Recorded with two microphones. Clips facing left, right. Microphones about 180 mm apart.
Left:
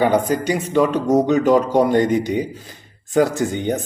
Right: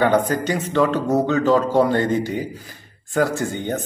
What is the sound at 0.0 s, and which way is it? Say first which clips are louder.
A man's voice: left 1 dB; 10° left (ahead or behind).